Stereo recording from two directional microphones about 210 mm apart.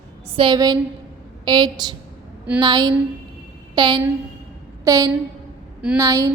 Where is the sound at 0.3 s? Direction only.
20° right (ahead or behind).